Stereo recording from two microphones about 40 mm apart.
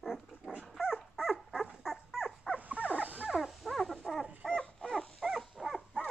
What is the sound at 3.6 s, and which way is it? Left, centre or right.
Dog, centre.